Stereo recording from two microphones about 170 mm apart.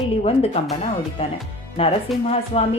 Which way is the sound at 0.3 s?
35° left (ahead or behind).